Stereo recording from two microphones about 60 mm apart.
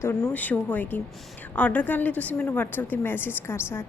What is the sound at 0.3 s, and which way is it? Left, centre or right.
A woman's voice, left.